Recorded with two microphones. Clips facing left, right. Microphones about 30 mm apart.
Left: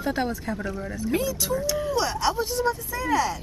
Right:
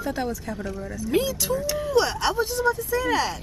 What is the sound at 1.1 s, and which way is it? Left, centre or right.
Speech, right.